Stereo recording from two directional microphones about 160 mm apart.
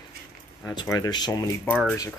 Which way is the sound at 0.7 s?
25° left (ahead or behind).